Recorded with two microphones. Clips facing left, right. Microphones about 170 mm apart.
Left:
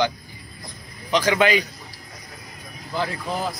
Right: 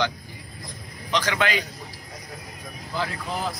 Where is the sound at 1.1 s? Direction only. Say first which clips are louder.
Left 6 dB; 10° left (ahead or behind).